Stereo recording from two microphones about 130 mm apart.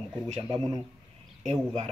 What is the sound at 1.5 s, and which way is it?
Speech, 55° right (ahead or behind).